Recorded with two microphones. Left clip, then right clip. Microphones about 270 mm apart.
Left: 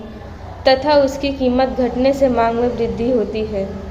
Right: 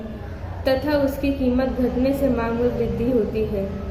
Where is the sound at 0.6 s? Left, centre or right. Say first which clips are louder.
Left 8 dB; centre.